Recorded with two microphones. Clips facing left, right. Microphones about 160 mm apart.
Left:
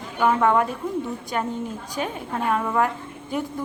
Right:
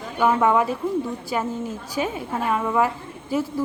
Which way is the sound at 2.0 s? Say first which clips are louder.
Right 2 dB; 5° right (ahead or behind).